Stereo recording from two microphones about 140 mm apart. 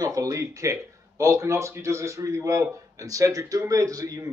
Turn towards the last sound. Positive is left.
turn(degrees=-25)  # may be behind; listen again after turning